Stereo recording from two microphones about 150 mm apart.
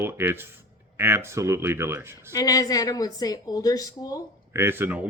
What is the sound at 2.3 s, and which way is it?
A woman's voice, 25° left (ahead or behind).